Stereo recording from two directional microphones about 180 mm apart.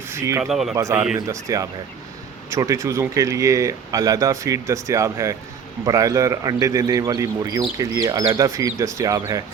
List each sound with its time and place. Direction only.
0.1 s speech: 15° right (ahead or behind)
0.4 s speech: centre (ahead or behind)
0.7 s a man's voice: 15° right (ahead or behind)